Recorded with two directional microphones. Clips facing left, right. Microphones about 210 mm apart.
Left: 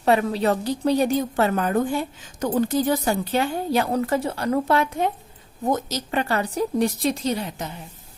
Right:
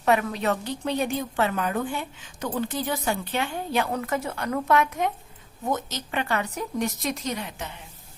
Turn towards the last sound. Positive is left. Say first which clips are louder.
# left 6 dB
turn(degrees=35)  # may be behind; listen again after turning